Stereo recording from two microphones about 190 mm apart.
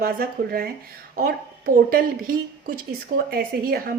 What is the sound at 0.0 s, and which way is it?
A woman's voice, 50° right (ahead or behind).